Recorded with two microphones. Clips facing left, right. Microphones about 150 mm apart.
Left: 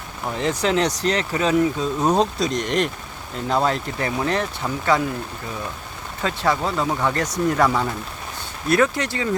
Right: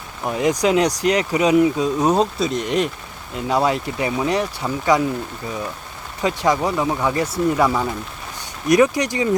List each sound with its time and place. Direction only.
0.3 s speech: 15° right (ahead or behind)
6.2 s speech: 15° right (ahead or behind)